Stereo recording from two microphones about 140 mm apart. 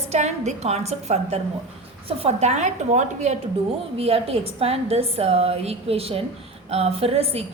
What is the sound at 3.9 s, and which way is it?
A woman's voice, 45° right (ahead or behind).